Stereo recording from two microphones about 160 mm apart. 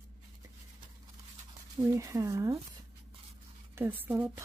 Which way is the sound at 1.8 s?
20° right (ahead or behind).